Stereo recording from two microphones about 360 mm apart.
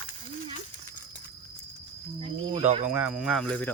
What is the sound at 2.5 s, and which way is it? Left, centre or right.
Speech, centre.